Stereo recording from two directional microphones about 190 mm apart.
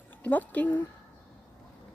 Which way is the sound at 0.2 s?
10° left (ahead or behind).